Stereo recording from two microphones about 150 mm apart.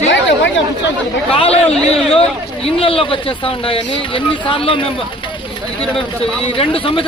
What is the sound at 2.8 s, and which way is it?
A man's voice, 35° left (ahead or behind).